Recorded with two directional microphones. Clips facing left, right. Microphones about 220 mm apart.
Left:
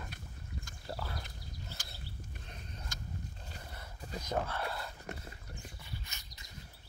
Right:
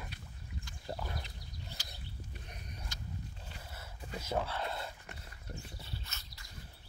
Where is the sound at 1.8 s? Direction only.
50° left (ahead or behind).